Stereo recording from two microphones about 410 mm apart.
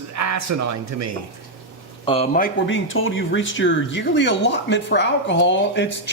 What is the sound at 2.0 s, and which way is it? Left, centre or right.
Speech, centre.